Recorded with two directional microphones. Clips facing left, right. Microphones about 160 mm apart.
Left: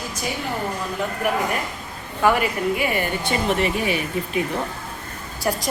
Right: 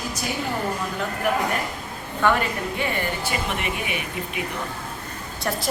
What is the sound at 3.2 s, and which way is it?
Speech, 35° left (ahead or behind).